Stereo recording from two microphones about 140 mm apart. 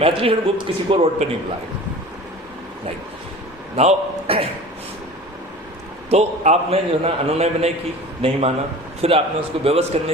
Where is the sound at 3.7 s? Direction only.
45° right (ahead or behind).